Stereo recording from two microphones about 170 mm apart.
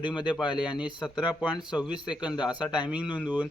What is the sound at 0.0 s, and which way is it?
Speech, 25° left (ahead or behind).